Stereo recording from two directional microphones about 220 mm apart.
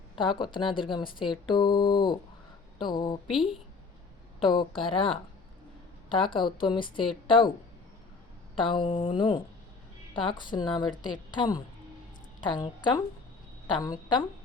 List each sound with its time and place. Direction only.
0.2 s a woman's voice: 20° left (ahead or behind)
3.2 s speech: centre (ahead or behind)
4.4 s a woman's voice: 25° left (ahead or behind)
8.5 s a woman's voice: 20° left (ahead or behind)